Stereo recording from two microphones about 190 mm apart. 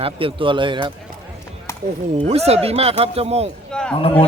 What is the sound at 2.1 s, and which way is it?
Speech, 35° right (ahead or behind).